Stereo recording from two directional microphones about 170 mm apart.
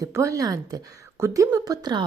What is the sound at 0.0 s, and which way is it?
A woman's voice, 15° right (ahead or behind).